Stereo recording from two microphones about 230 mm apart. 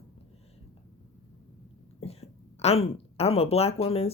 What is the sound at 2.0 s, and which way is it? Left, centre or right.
A woman's voice, left.